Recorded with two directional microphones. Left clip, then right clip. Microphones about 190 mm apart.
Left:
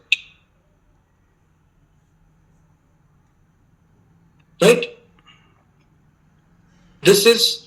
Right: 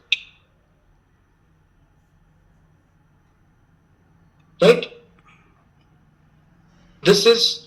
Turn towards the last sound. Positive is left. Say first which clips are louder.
# left 1 dB
turn(degrees=50)  # may be behind; listen again after turning